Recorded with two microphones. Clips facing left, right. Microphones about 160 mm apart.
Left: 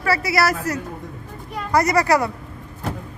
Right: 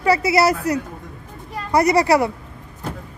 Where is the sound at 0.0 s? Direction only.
20° right (ahead or behind).